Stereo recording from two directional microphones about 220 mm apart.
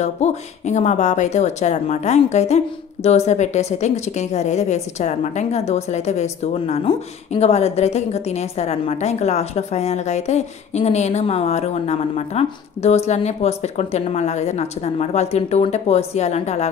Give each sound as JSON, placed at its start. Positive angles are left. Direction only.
{"t": 0.0, "sound": "a woman's voice", "side_deg": 30}